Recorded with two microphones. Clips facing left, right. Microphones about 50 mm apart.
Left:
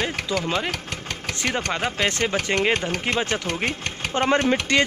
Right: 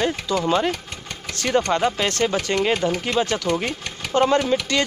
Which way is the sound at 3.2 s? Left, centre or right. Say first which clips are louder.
Right 2 dB; left.